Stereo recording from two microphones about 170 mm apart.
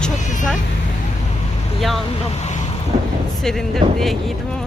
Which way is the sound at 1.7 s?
Centre (ahead or behind).